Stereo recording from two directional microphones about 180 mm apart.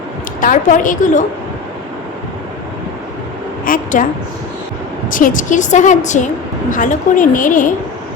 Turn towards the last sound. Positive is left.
turn(degrees=45)  # may be behind; listen again after turning